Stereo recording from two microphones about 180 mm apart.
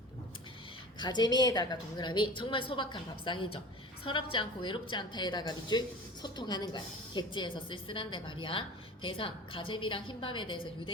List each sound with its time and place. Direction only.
0.9 s a woman's voice: 25° left (ahead or behind)